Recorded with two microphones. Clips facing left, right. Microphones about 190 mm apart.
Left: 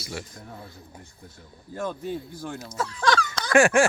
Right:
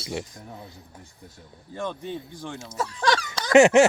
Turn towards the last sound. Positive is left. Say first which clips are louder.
# right 4 dB
turn(degrees=-20)  # may be behind; listen again after turning